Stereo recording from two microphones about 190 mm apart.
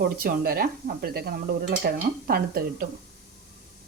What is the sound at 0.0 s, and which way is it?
A woman's voice, 50° right (ahead or behind).